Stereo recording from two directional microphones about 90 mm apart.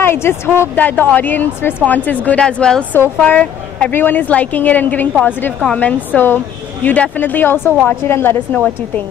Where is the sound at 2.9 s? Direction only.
20° left (ahead or behind).